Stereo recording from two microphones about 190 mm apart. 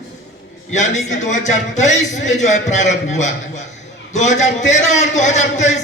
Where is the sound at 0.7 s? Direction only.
40° left (ahead or behind).